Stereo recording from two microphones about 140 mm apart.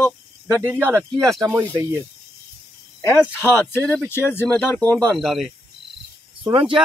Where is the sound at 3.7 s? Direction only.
15° left (ahead or behind).